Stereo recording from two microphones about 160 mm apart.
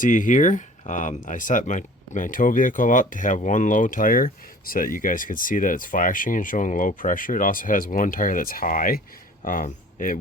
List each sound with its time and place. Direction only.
0.0 s speech: 55° left (ahead or behind)